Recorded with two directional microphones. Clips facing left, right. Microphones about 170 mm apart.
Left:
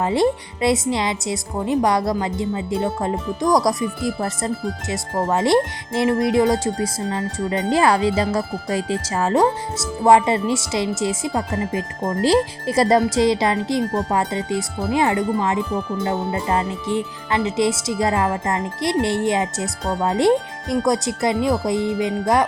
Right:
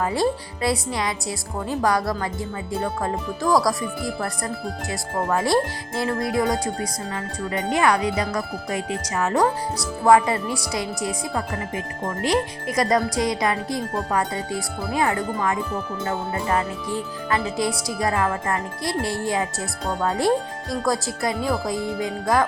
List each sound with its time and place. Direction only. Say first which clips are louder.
0.0 s speech: left 4 dB; 25° left (ahead or behind)